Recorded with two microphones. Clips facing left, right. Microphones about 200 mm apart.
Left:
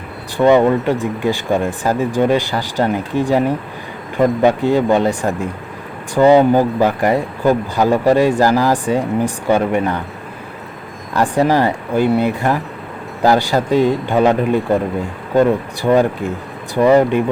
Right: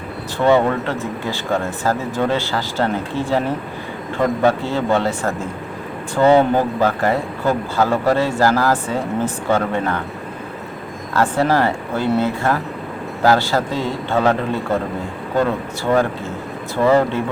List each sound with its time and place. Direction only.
0.3 s speech: 15° left (ahead or behind)
11.1 s speech: 15° left (ahead or behind)